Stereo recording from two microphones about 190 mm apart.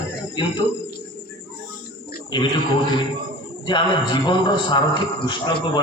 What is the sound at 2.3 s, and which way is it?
Speech, 20° left (ahead or behind).